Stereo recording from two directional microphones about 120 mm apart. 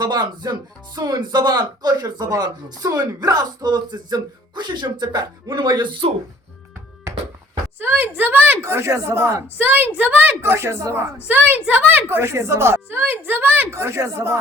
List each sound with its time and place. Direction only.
0.0 s speech: 35° right (ahead or behind)
7.8 s a woman's voice: 15° right (ahead or behind)